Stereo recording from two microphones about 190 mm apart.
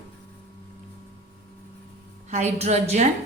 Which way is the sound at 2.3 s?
35° right (ahead or behind).